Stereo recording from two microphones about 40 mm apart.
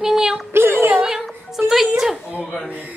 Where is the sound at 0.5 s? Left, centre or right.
Right.